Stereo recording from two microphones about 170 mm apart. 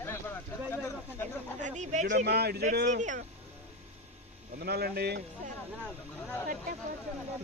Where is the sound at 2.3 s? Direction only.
70° right (ahead or behind).